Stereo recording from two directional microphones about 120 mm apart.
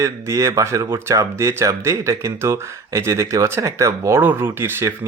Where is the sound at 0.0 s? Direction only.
25° right (ahead or behind).